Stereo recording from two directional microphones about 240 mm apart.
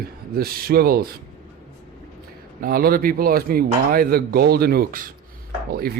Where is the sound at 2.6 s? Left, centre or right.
Right.